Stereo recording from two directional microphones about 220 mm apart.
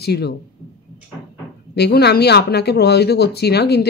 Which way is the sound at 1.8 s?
50° left (ahead or behind).